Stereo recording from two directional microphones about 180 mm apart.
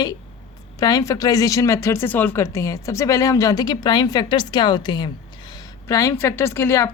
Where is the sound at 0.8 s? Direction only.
20° left (ahead or behind).